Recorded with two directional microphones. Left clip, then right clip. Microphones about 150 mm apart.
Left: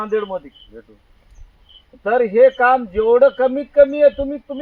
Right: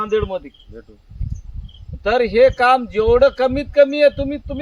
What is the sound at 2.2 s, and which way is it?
Speech, 15° right (ahead or behind).